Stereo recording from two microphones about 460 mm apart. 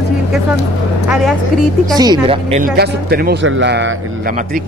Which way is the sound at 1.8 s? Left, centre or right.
Centre.